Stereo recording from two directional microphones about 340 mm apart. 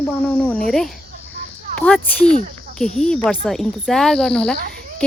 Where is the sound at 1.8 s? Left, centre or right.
Centre.